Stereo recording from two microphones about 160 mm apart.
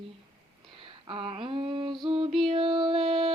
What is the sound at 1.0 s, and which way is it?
A woman's voice, 35° right (ahead or behind).